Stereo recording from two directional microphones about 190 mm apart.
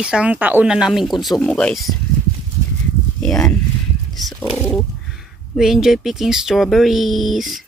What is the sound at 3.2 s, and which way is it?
Speech, 5° left (ahead or behind).